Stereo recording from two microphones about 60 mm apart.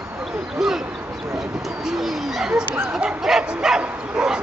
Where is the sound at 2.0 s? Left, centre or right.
Centre.